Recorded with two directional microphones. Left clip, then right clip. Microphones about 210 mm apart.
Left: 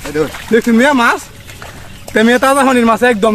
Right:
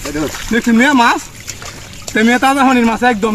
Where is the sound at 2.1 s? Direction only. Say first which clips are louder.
Left 2 dB; 45° left (ahead or behind).